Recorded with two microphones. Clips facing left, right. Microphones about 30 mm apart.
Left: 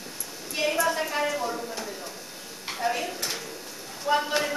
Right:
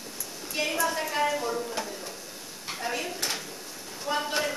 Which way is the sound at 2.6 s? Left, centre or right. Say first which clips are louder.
Left 4 dB; centre.